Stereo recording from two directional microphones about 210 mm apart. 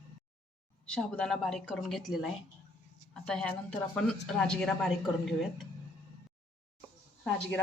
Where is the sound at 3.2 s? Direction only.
5° left (ahead or behind).